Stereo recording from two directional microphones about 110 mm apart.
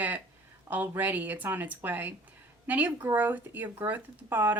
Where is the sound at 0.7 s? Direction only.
15° right (ahead or behind).